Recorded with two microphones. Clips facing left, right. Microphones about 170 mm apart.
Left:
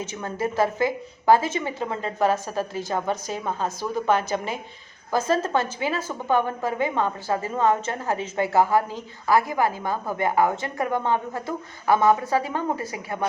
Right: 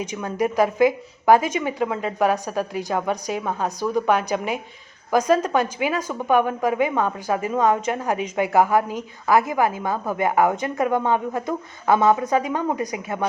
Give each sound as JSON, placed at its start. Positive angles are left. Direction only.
{"t": 0.0, "sound": "a woman's voice", "side_deg": -15}
{"t": 3.2, "sound": "a woman's voice", "side_deg": -5}
{"t": 4.2, "sound": "a woman's voice", "side_deg": -15}